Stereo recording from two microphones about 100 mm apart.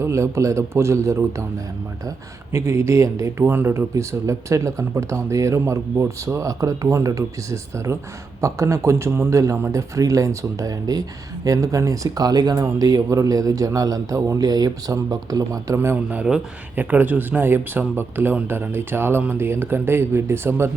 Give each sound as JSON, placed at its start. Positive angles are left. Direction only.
{"t": 0.0, "sound": "speech", "side_deg": -30}
{"t": 2.5, "sound": "speech", "side_deg": -25}
{"t": 16.0, "sound": "speech", "side_deg": -10}